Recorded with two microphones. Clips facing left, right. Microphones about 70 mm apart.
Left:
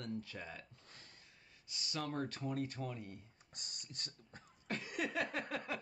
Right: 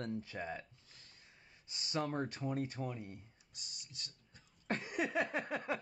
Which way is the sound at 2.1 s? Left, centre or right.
Right.